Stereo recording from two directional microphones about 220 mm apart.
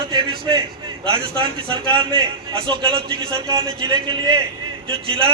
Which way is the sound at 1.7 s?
20° right (ahead or behind).